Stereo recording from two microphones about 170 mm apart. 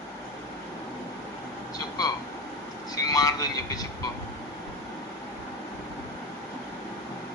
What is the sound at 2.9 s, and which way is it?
Speech, 20° left (ahead or behind).